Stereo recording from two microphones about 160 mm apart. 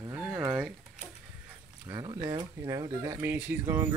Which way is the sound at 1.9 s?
25° right (ahead or behind).